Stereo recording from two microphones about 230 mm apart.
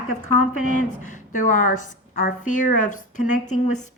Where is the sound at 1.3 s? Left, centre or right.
Left.